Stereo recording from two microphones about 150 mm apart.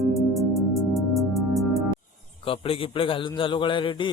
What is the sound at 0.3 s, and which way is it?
Music, centre (ahead or behind).